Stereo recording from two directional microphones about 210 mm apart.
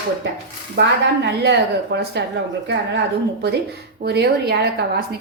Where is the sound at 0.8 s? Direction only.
55° right (ahead or behind).